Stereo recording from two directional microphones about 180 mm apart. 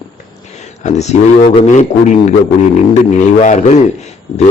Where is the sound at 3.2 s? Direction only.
40° left (ahead or behind).